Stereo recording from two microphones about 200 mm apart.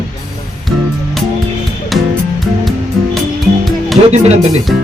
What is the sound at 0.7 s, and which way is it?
Music, centre (ahead or behind).